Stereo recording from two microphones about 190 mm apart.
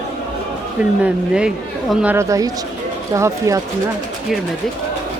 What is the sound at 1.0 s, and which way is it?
Speech, 5° right (ahead or behind).